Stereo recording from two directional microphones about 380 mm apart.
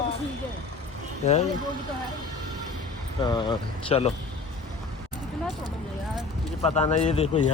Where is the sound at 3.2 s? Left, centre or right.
Centre.